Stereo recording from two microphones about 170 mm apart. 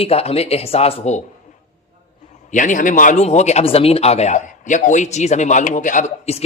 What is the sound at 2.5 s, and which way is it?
Speech, 50° left (ahead or behind).